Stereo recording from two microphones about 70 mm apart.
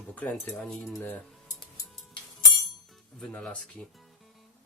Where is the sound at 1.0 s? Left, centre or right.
Left.